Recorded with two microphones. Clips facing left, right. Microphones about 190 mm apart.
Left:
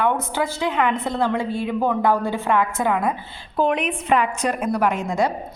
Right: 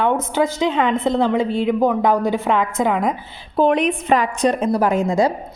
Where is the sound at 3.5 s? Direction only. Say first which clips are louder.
Right 5 dB; 35° right (ahead or behind).